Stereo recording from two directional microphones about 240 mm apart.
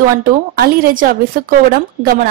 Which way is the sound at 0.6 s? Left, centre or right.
Right.